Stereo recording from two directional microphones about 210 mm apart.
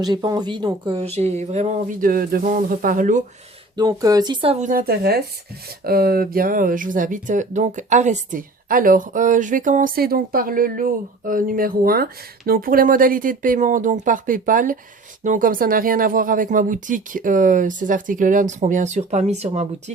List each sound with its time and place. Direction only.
0.0 s speech: 20° right (ahead or behind); by 3.2 s 40° right (ahead or behind)
3.8 s speech: 15° right (ahead or behind)